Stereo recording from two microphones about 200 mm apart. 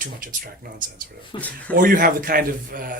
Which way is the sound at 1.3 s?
25° left (ahead or behind).